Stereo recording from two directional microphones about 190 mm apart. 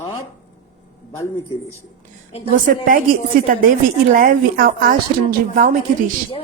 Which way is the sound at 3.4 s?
45° right (ahead or behind).